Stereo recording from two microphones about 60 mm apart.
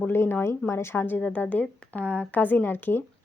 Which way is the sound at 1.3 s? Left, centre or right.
Left.